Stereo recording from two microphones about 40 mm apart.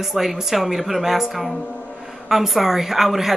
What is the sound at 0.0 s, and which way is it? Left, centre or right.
A woman's voice, centre.